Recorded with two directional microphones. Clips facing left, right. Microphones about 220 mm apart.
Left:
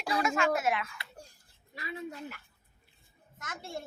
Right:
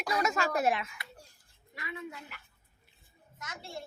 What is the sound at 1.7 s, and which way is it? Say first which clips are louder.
Speech: left 2 dB; 30° left (ahead or behind).